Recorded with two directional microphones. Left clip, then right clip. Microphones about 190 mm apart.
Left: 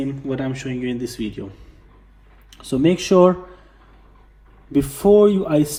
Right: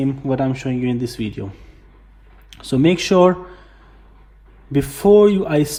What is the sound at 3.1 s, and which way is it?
Speech, 45° left (ahead or behind).